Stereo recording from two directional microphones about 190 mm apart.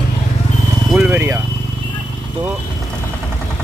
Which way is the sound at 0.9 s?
10° right (ahead or behind).